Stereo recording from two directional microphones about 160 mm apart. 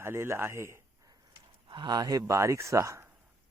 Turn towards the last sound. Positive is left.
turn(degrees=-20)  # may be behind; listen again after turning